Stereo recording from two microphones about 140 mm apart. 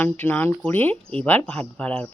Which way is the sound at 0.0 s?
15° left (ahead or behind).